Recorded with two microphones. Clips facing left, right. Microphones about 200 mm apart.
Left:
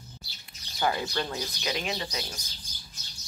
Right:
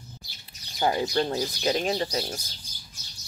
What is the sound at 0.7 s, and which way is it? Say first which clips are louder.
Speech: right 4 dB; 25° right (ahead or behind).